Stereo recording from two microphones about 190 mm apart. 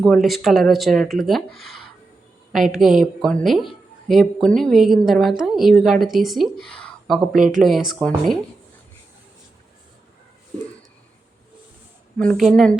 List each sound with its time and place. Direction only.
0.0 s a woman's voice: centre (ahead or behind)
7.3 s speech: 45° right (ahead or behind)
7.6 s speech: centre (ahead or behind)
12.1 s speech: 5° left (ahead or behind)